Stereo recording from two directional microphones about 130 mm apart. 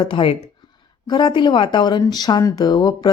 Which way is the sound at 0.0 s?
40° left (ahead or behind).